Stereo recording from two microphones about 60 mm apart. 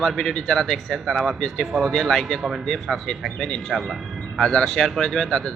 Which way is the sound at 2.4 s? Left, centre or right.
Centre.